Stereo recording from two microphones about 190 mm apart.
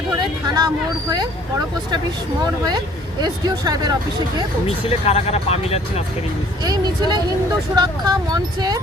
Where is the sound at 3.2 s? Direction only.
20° right (ahead or behind).